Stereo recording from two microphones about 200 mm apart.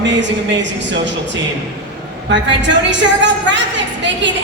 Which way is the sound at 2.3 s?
65° right (ahead or behind).